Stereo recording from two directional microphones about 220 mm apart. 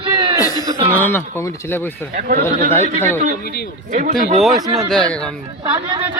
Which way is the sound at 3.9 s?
35° right (ahead or behind).